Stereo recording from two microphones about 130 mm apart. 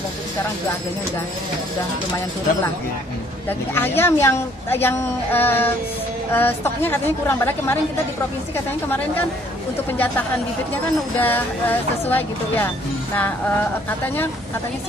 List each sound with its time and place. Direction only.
3.4 s speech: 15° left (ahead or behind)
8.8 s speech: 15° left (ahead or behind)
10.7 s speech: 15° left (ahead or behind)